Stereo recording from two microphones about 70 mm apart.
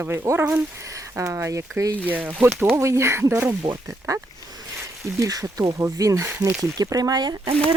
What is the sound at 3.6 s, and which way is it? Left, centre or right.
Speech, right.